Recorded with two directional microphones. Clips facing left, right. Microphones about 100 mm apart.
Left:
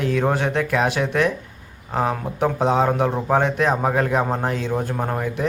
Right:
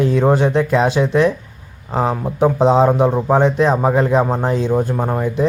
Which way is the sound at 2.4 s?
20° right (ahead or behind).